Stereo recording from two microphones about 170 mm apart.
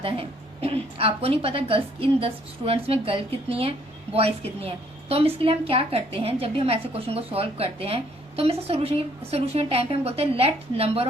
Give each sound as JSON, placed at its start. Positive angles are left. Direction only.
{"t": 0.0, "sound": "a woman's voice", "side_deg": -35}